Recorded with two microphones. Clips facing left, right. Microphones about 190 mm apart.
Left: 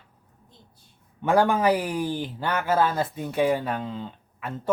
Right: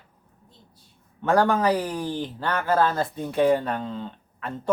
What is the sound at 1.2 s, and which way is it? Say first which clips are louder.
Speech: even; 10° left (ahead or behind).